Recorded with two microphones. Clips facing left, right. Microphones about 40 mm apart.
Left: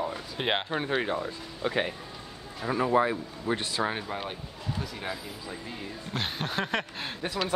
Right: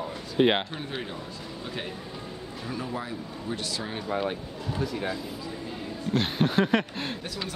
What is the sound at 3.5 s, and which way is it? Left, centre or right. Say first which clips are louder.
Speech: left 5 dB; left.